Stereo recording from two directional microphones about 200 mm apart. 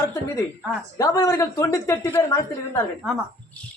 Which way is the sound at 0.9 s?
15° left (ahead or behind).